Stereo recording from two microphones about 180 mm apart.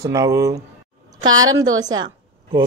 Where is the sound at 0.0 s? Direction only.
20° right (ahead or behind).